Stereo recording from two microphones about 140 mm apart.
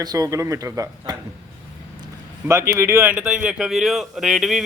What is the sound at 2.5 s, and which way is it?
A man's voice, 20° right (ahead or behind).